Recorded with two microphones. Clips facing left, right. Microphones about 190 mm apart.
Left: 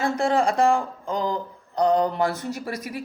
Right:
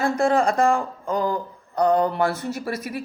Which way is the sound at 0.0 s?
15° left (ahead or behind).